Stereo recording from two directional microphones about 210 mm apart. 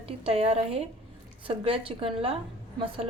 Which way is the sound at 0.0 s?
30° right (ahead or behind).